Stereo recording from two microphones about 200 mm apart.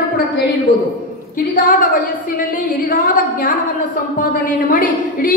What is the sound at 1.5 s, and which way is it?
A woman's voice, 45° left (ahead or behind).